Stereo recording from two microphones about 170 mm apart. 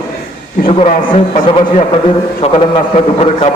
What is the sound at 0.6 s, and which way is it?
A man's voice, 35° left (ahead or behind).